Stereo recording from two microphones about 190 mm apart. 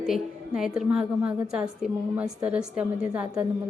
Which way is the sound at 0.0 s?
Centre (ahead or behind).